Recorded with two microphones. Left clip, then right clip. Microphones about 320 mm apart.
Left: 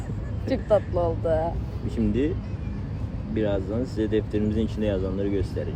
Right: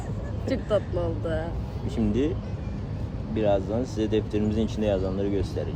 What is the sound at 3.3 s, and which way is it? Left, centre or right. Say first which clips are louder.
Speech: right 2 dB; centre.